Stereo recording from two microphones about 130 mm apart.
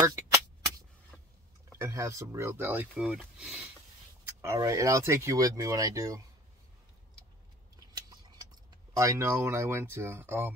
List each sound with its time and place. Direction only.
1.8 s speech: 25° right (ahead or behind); by 3.6 s 5° right (ahead or behind)
4.3 s speech: 20° right (ahead or behind)
7.9 s a sound: 35° right (ahead or behind)
8.9 s speech: 25° right (ahead or behind)